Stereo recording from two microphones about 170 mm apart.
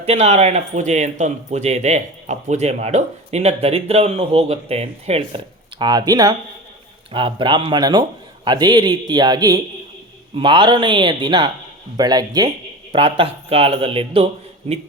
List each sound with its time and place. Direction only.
0.0 s speech: 40° right (ahead or behind)
5.8 s speech: 25° right (ahead or behind)